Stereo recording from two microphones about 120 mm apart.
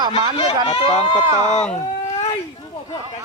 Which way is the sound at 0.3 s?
50° left (ahead or behind).